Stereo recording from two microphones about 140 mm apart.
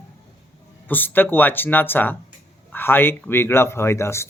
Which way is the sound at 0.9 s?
15° left (ahead or behind).